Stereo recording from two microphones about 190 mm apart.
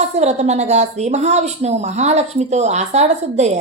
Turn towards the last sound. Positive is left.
turn(degrees=-35)  # may be behind; listen again after turning